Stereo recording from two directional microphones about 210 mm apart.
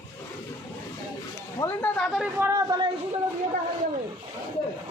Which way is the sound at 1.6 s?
10° left (ahead or behind).